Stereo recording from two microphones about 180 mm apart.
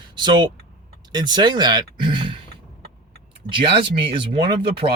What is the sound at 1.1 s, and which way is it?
Speech, 25° right (ahead or behind).